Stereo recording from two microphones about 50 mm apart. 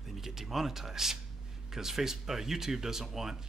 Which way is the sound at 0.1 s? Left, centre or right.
Centre.